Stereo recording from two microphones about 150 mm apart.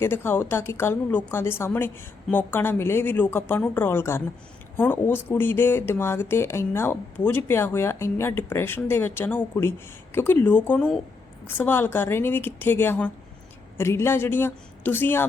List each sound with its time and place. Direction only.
0.0 s speech: 15° left (ahead or behind)